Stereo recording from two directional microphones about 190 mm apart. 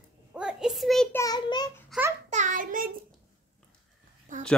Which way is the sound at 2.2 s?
40° right (ahead or behind).